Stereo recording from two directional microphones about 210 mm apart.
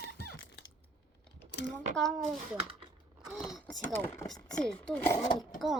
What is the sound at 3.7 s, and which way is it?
Speech, 10° left (ahead or behind).